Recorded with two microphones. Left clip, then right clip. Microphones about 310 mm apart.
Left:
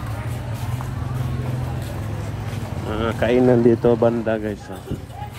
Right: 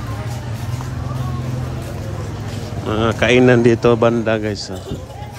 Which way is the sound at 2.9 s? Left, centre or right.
Left.